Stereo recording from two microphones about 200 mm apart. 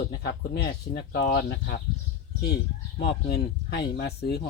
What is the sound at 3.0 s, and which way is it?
Speech, 55° left (ahead or behind).